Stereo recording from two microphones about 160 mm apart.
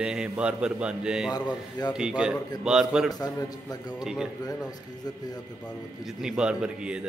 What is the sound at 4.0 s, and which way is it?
Speech, 5° right (ahead or behind).